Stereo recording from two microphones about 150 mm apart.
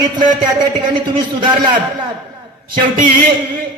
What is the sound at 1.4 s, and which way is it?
Speech, 30° right (ahead or behind).